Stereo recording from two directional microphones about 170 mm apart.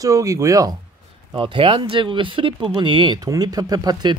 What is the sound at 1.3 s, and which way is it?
Speech, 30° right (ahead or behind).